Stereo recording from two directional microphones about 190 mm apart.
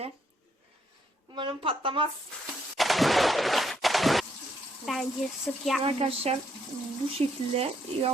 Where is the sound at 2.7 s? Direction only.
Centre (ahead or behind).